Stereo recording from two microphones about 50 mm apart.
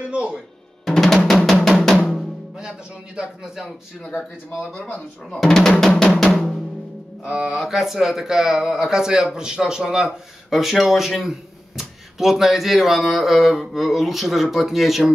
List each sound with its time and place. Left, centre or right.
0.0 s music: centre
0.8 s drum: centre
3.2 s speech: centre
4.1 s speech: left
5.3 s speech: centre
7.2 s speech: centre